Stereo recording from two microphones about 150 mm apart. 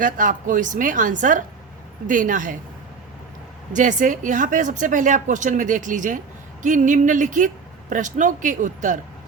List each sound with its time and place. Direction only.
0.0 s speech: 60° right (ahead or behind)
3.7 s speech: 55° right (ahead or behind)